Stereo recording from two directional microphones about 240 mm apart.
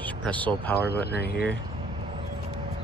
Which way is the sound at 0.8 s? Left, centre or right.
Left.